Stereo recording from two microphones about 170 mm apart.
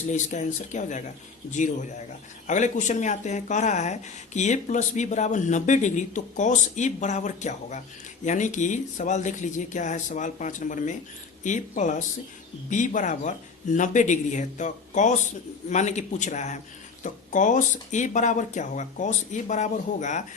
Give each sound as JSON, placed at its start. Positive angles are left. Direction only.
{"t": 0.1, "sound": "speech", "side_deg": 45}